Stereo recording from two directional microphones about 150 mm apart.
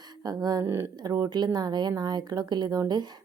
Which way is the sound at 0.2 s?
25° right (ahead or behind).